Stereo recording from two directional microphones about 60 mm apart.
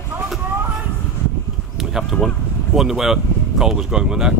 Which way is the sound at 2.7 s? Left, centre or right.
Centre.